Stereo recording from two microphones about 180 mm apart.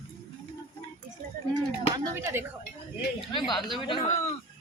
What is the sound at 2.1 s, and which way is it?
Speech, 15° right (ahead or behind).